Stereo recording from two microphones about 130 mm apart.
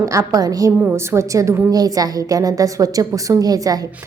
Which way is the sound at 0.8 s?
15° right (ahead or behind).